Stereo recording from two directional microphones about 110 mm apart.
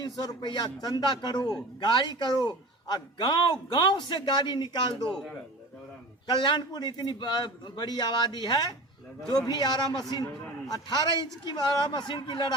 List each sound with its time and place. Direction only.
0.0 s a man's voice: 40° left (ahead or behind)
6.2 s a man's voice: 45° left (ahead or behind)